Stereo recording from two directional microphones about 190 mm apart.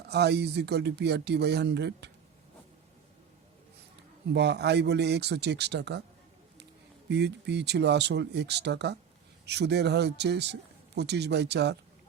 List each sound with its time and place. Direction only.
0.1 s a man's voice: 60° right (ahead or behind)
4.3 s a man's voice: 60° right (ahead or behind)
7.1 s a man's voice: 65° right (ahead or behind)